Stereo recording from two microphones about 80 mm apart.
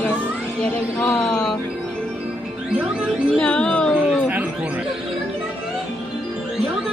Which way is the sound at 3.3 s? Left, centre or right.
Centre.